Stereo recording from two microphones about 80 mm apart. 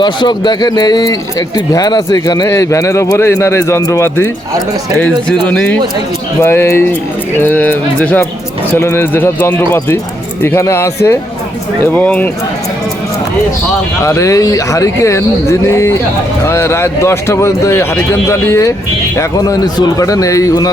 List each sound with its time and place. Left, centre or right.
0.0 s speech: left
2.5 s speech: left
3.8 s a man's voice: left
5.5 s speech: centre
6.4 s speech: left
7.3 s music: left
8.7 s speech: left
11.9 s music: centre
14.0 s speech: left
19.5 s a man's voice: left